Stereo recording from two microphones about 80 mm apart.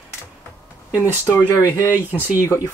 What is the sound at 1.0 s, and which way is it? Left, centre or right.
Speech, left.